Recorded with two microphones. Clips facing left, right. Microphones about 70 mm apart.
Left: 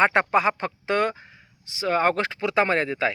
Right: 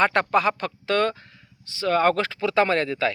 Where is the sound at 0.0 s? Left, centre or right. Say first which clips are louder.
Even; centre.